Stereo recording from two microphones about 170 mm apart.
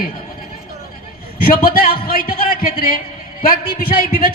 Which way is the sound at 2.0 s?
60° left (ahead or behind).